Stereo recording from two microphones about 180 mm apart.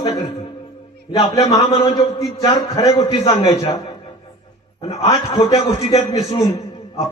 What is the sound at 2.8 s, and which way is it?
Speech, 35° left (ahead or behind).